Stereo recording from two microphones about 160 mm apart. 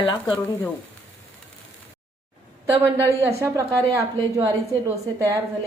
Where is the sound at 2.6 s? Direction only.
20° right (ahead or behind).